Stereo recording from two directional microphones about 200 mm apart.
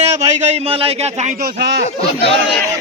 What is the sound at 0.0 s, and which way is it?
Speech, 30° right (ahead or behind).